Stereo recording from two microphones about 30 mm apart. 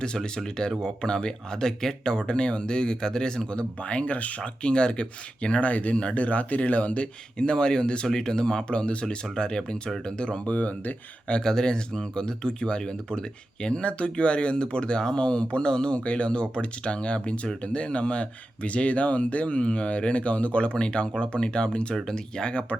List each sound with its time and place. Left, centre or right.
0.0 s speech: left
3.5 s speech: left
4.6 s speech: left
5.5 s speech: left
7.3 s speech: left
10.5 s speech: left
11.4 s speech: left
19.5 s speech: left